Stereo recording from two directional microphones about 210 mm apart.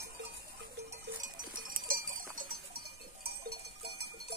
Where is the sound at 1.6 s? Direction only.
40° right (ahead or behind).